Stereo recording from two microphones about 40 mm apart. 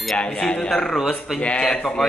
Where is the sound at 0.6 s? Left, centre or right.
Centre.